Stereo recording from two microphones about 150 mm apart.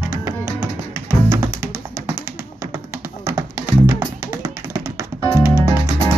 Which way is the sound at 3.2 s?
20° right (ahead or behind).